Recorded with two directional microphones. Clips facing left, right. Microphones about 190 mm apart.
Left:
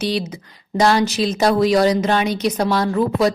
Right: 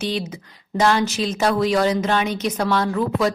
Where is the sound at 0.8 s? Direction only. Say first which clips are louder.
Left 3 dB; 35° left (ahead or behind).